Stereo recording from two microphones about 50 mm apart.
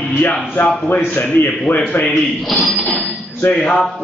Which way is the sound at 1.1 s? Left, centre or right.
Left.